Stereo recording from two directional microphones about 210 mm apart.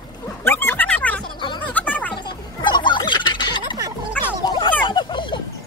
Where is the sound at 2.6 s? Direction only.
20° left (ahead or behind).